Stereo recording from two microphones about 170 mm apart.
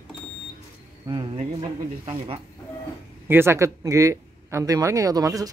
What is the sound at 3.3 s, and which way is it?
Speech, 15° right (ahead or behind).